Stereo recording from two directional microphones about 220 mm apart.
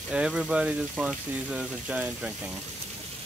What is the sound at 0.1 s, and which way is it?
Speech, 5° right (ahead or behind).